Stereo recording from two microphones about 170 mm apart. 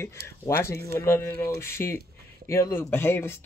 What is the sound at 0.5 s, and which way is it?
Speech, 15° left (ahead or behind).